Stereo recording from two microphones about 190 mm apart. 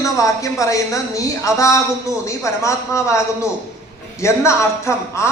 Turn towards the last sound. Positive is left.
turn(degrees=15)  # may be behind; listen again after turning